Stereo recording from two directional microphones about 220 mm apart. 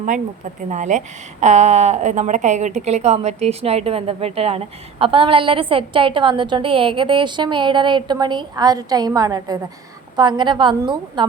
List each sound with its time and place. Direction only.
0.7 s a woman's voice: 35° right (ahead or behind)